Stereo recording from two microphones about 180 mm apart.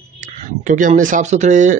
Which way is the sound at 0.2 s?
45° right (ahead or behind).